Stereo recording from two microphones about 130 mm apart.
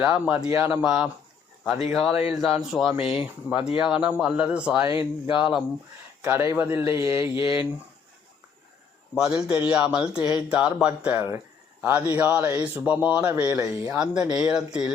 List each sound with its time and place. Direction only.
0.0 s speech: 10° right (ahead or behind)
0.5 s mantra: 20° right (ahead or behind)
0.8 s speech: 10° right (ahead or behind)
6.2 s speech: 20° right (ahead or behind)
6.9 s mantra: 25° right (ahead or behind)
7.3 s speech: 45° left (ahead or behind)
9.1 s speech: 5° right (ahead or behind)
13.9 s speech: 5° right (ahead or behind)